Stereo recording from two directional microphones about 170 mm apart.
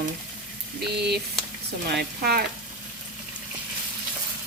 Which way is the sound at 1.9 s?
65° right (ahead or behind).